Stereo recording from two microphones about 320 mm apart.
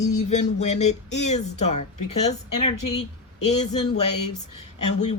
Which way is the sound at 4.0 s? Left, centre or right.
Left.